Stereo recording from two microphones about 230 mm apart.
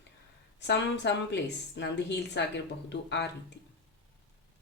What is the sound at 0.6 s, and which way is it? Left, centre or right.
Speech, left.